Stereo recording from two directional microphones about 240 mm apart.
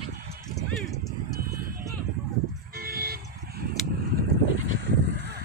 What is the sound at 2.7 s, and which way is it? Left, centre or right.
Vehicle, right.